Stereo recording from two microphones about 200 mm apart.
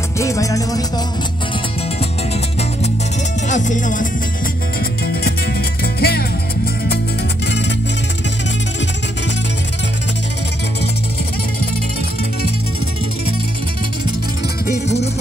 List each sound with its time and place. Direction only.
0.2 s music: 15° left (ahead or behind)
3.4 s music: 40° left (ahead or behind)
5.9 s music: 50° left (ahead or behind)